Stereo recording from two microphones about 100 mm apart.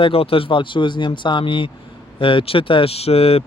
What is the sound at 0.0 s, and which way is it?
Speech, 65° left (ahead or behind).